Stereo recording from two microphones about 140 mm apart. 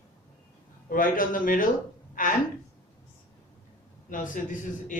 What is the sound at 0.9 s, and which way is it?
A man's voice, 80° left.